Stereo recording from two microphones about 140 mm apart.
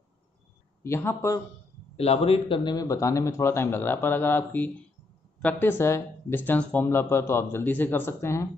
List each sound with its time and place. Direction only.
0.8 s a man's voice: 20° left (ahead or behind)
2.0 s a man's voice: 45° left (ahead or behind); by 8.5 s 20° left (ahead or behind)